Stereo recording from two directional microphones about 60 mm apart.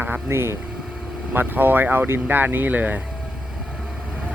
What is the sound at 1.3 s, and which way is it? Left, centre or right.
Speech, right.